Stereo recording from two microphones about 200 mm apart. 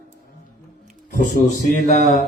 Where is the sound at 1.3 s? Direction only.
40° left (ahead or behind).